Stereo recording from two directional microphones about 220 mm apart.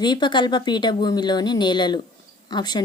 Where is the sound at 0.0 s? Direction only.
20° left (ahead or behind).